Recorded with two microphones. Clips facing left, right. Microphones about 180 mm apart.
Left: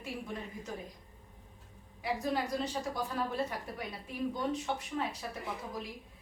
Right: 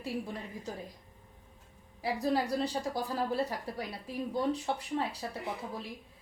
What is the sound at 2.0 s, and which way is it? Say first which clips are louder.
A woman's voice: right 3 dB; 35° right (ahead or behind).